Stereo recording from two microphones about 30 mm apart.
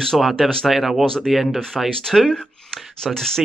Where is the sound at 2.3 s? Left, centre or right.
Left.